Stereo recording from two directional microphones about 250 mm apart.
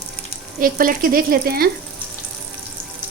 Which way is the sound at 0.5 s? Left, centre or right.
Right.